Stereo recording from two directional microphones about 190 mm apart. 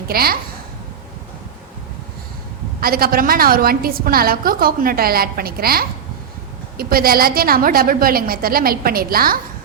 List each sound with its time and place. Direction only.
0.1 s a woman's voice: 55° right (ahead or behind)
2.8 s a woman's voice: 50° right (ahead or behind)